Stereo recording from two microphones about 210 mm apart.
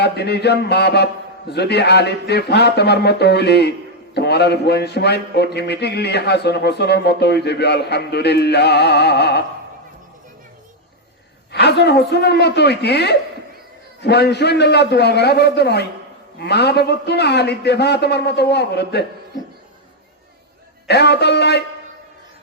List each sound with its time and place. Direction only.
0.0 s a man's voice: 50° left (ahead or behind)
11.5 s a man's voice: 50° left (ahead or behind)
20.8 s a man's voice: 50° left (ahead or behind)